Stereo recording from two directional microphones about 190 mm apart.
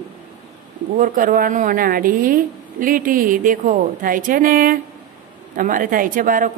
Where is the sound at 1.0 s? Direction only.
45° right (ahead or behind).